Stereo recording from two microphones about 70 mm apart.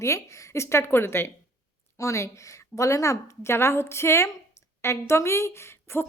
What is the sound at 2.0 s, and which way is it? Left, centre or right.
A woman's voice, left.